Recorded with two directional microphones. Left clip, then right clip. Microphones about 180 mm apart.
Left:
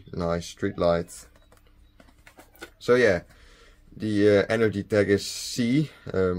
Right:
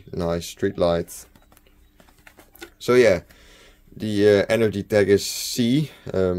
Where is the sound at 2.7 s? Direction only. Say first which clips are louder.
Right 4 dB; 40° right (ahead or behind).